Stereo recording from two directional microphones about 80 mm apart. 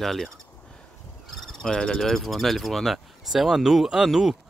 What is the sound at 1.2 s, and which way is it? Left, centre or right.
Speech, centre.